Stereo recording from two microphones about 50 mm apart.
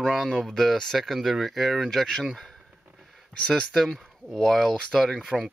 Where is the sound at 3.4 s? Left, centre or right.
Centre.